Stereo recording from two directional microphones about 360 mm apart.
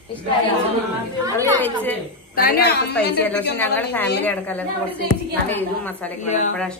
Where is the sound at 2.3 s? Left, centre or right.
Left.